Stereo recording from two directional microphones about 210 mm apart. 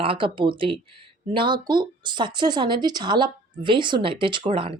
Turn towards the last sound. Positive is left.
turn(degrees=-25)  # may be behind; listen again after turning